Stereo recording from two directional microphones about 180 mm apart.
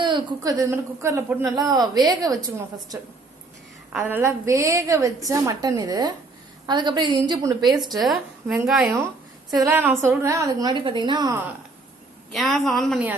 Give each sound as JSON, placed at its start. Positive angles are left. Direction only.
{"t": 0.0, "sound": "a woman's voice", "side_deg": -25}
{"t": 3.9, "sound": "a woman's voice", "side_deg": -10}
{"t": 7.6, "sound": "a woman's voice", "side_deg": 0}
{"t": 12.3, "sound": "speech", "side_deg": 0}